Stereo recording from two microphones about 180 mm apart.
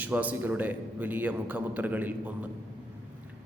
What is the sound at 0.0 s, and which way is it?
A man's voice, 10° right (ahead or behind).